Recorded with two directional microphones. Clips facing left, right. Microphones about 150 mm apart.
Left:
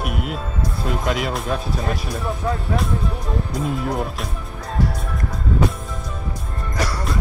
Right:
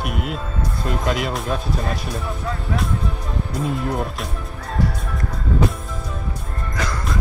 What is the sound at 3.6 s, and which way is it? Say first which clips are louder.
Speech: right 1 dB; centre (ahead or behind).